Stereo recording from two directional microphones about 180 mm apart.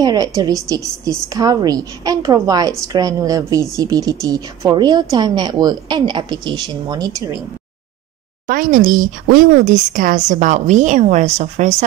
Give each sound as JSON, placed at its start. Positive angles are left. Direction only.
{"t": 0.0, "sound": "a woman's voice", "side_deg": -20}
{"t": 8.5, "sound": "speech", "side_deg": -50}